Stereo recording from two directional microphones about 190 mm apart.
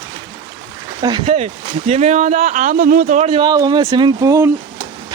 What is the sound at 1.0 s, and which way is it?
Speech, 25° right (ahead or behind).